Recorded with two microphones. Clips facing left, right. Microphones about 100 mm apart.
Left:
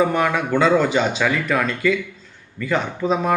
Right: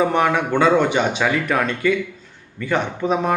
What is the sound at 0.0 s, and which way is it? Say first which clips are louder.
Speech: right 1 dB; 25° right (ahead or behind).